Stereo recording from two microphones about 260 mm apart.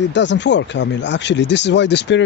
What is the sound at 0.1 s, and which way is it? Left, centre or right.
Speech, left.